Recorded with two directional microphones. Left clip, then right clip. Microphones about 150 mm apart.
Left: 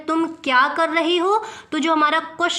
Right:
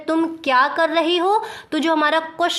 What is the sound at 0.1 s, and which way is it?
A woman's voice, 25° right (ahead or behind).